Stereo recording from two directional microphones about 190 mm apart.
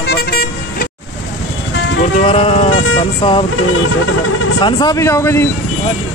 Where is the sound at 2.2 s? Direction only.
30° left (ahead or behind).